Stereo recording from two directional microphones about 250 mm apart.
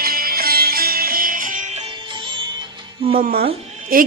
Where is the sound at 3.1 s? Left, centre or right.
Right.